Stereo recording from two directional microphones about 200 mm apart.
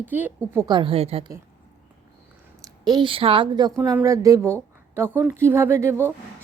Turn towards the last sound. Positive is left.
turn(degrees=-15)  # may be behind; listen again after turning